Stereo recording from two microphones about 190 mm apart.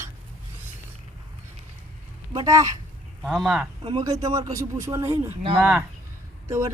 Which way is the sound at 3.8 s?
25° right (ahead or behind).